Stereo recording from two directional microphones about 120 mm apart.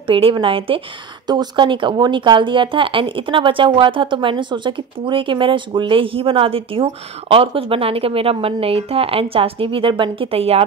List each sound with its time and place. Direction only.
0.0 s speech: 45° right (ahead or behind)
1.2 s speech: 35° right (ahead or behind); by 10.6 s 55° right (ahead or behind)